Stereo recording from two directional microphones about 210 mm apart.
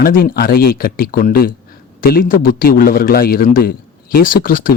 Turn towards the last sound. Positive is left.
turn(degrees=40)  # may be behind; listen again after turning